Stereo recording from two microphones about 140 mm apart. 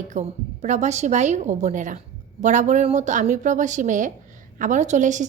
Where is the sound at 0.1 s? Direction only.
55° right (ahead or behind).